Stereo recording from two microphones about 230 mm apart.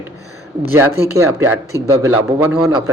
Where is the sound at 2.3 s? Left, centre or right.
Right.